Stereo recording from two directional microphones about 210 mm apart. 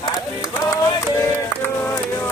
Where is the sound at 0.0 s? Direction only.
20° left (ahead or behind).